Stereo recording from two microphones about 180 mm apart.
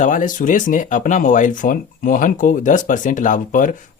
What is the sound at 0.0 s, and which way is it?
Speech, 45° left (ahead or behind).